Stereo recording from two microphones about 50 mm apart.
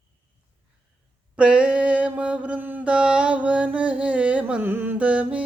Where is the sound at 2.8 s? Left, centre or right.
Centre.